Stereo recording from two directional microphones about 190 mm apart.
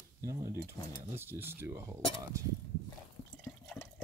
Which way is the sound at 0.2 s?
15° right (ahead or behind).